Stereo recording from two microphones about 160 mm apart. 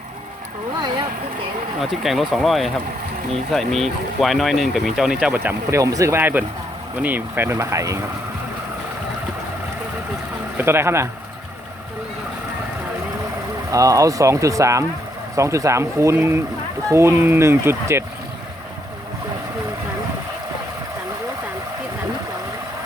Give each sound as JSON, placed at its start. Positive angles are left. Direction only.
{"t": 1.8, "sound": "speech", "side_deg": 0}
{"t": 10.6, "sound": "speech", "side_deg": -15}
{"t": 13.7, "sound": "speech", "side_deg": -20}